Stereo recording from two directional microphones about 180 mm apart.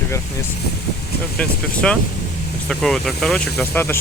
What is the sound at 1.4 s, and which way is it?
Speech, 5° left (ahead or behind).